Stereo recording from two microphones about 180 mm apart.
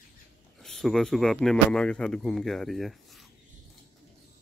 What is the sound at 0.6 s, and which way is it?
Speech, centre (ahead or behind).